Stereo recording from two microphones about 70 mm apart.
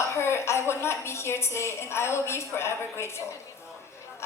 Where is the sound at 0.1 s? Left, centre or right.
Left.